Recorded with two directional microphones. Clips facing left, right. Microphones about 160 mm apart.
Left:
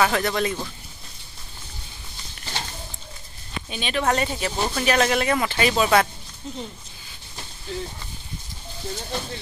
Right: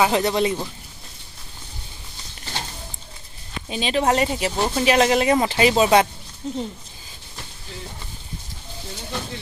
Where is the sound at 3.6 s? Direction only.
30° right (ahead or behind).